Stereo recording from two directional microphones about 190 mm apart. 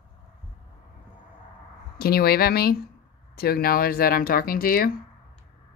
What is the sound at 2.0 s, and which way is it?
Speech, 55° left (ahead or behind).